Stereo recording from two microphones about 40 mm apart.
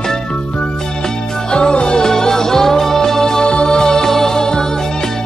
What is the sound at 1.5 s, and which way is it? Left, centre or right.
Music, left.